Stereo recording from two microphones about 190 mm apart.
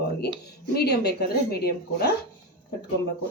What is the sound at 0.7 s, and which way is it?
A woman's voice, 60° left (ahead or behind).